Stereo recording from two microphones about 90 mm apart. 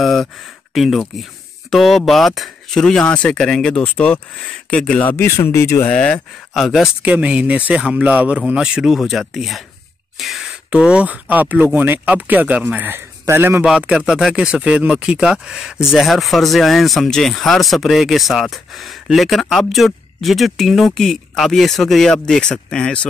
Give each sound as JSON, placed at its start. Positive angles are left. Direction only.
{"t": 0.0, "sound": "a sound", "side_deg": 5}
{"t": 0.7, "sound": "speech", "side_deg": 0}
{"t": 5.9, "sound": "speech", "side_deg": 15}
{"t": 7.0, "sound": "speech", "side_deg": -15}
{"t": 10.1, "sound": "a sound", "side_deg": 0}
{"t": 10.7, "sound": "a man's voice", "side_deg": -10}
{"t": 13.7, "sound": "speech", "side_deg": -10}